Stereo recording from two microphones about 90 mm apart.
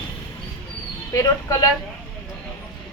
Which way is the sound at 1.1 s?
40° left (ahead or behind).